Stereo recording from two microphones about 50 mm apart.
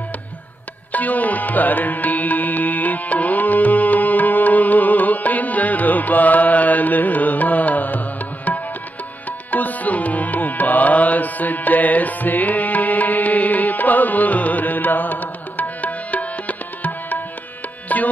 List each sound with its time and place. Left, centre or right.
0.9 s music: left